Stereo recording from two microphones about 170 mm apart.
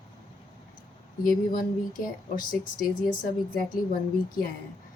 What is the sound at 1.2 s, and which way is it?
Speech, 55° left (ahead or behind).